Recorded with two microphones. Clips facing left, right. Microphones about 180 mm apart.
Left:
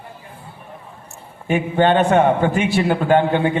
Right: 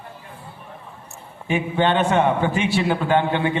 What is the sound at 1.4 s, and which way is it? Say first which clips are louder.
A man's voice: left 4 dB; 50° left (ahead or behind).